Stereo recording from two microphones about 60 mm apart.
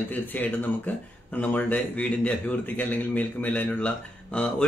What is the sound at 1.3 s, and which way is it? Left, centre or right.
Speech, left.